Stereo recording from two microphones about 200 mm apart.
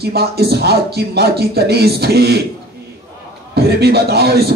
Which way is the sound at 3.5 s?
55° right (ahead or behind).